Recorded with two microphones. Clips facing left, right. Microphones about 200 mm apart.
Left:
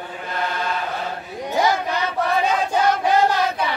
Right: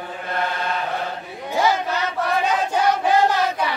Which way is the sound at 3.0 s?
15° left (ahead or behind).